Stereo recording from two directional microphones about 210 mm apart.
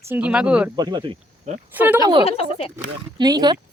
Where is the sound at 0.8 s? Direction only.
20° right (ahead or behind).